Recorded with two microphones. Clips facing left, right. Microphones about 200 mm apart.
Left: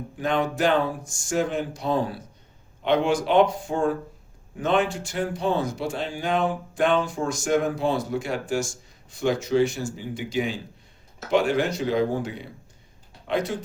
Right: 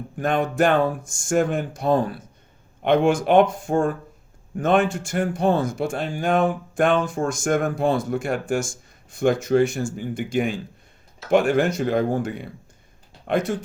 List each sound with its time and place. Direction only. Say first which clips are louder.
0.2 s speech: right 3 dB; 50° right (ahead or behind)